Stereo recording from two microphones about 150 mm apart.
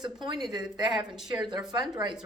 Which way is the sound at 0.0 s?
30° right (ahead or behind).